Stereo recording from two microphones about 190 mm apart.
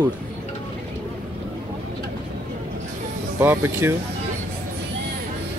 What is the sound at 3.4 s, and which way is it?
Speech, 10° right (ahead or behind).